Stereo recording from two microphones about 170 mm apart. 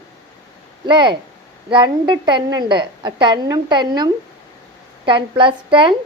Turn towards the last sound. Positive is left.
turn(degrees=-30)  # may be behind; listen again after turning